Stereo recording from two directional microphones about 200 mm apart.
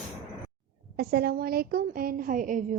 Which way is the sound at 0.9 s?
50° right (ahead or behind).